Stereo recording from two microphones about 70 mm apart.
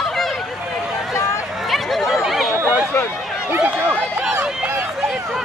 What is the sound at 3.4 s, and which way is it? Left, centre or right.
Speech, right.